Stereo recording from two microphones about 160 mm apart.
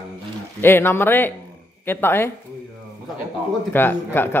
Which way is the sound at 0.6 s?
15° left (ahead or behind).